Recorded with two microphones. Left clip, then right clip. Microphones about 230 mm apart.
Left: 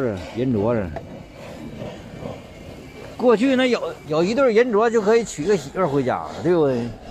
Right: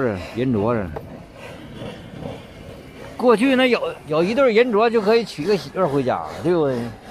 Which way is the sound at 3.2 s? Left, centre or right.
Centre.